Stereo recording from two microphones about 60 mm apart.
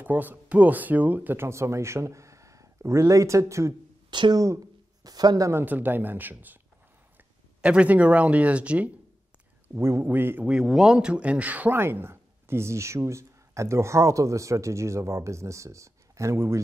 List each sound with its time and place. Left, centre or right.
0.0 s speech: right
1.3 s speech: right
4.3 s speech: right
5.0 s speech: right
5.7 s speech: right
7.6 s speech: right
9.8 s a man's voice: right
10.6 s speech: centre; by 11.7 s right
11.7 s speech: right